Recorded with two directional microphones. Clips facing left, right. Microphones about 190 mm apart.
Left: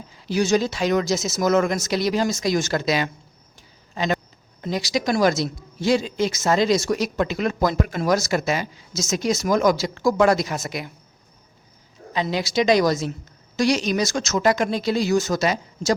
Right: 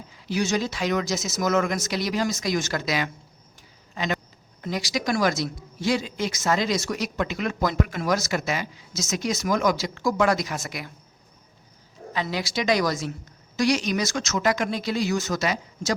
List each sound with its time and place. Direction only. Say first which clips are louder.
0.3 s speech: left 5 dB; 35° left (ahead or behind)
12.1 s speech: left 5 dB; 20° left (ahead or behind)